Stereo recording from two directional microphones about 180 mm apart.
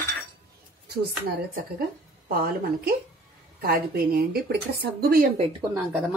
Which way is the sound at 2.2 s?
55° right (ahead or behind).